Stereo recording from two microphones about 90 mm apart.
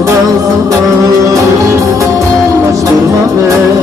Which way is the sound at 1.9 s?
35° right (ahead or behind).